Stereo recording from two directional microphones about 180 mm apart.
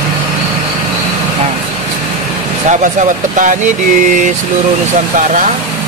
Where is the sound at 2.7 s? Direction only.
45° right (ahead or behind).